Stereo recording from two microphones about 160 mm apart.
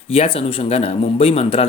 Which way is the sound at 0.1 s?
40° left (ahead or behind).